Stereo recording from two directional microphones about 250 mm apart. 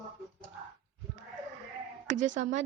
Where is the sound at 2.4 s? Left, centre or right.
Right.